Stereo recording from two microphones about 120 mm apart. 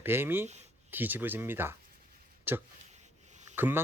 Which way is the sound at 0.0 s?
20° right (ahead or behind).